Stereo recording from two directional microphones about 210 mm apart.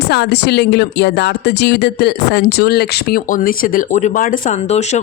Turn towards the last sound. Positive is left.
turn(degrees=30)  # may be behind; listen again after turning